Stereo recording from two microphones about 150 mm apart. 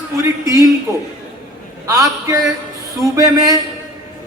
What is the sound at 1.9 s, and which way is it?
A man's voice, 20° right (ahead or behind).